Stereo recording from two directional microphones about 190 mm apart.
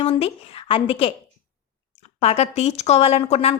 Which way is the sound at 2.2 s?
35° left (ahead or behind).